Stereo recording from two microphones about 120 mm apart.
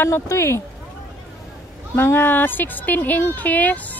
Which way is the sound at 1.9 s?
15° left (ahead or behind).